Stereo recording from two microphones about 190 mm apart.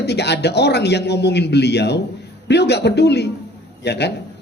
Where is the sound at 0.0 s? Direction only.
60° left (ahead or behind).